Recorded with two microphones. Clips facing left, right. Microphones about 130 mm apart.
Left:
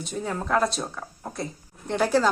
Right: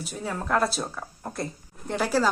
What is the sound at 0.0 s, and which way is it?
A woman's voice, 5° right (ahead or behind).